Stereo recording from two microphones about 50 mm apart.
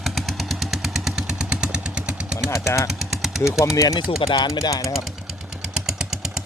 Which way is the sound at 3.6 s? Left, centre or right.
Left.